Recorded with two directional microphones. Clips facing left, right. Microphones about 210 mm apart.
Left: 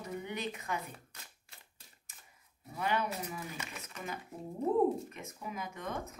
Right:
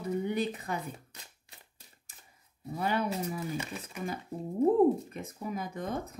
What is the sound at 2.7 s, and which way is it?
Speech, 35° right (ahead or behind).